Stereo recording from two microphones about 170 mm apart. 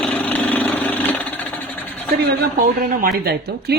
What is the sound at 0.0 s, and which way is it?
Lawn mower, 10° left (ahead or behind).